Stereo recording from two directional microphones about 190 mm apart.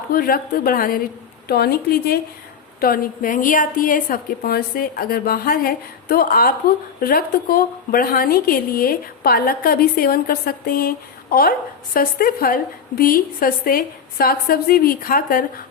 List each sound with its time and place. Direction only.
0.1 s a woman's voice: 50° left (ahead or behind)